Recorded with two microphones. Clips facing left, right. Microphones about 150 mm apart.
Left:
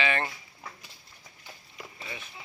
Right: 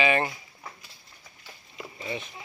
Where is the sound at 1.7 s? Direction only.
20° right (ahead or behind).